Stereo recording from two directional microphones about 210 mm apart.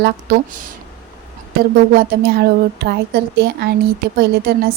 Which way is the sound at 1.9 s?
50° right (ahead or behind).